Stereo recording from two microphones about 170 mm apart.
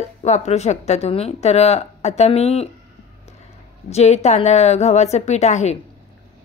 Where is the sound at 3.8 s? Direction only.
40° left (ahead or behind).